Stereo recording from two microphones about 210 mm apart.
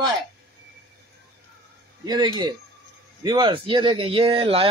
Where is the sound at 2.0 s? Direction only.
20° right (ahead or behind).